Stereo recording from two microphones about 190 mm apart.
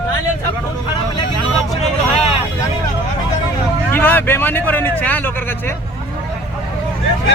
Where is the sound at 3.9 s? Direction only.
10° left (ahead or behind).